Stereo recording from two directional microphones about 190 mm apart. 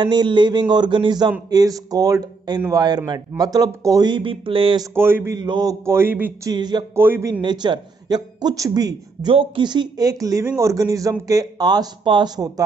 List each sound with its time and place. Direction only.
0.0 s a man's voice: 25° right (ahead or behind)
4.9 s a man's voice: 10° right (ahead or behind)
6.5 s a man's voice: 20° right (ahead or behind)